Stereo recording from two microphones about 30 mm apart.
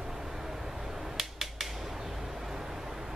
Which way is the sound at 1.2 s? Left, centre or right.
Centre.